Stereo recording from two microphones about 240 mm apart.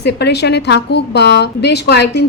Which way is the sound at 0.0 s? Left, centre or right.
Left.